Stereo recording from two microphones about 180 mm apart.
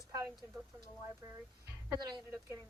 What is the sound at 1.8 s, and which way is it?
Speech, 20° right (ahead or behind).